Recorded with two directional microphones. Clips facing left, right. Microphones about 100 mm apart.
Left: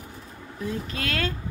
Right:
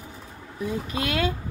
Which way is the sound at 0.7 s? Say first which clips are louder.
Right 2 dB; 15° right (ahead or behind).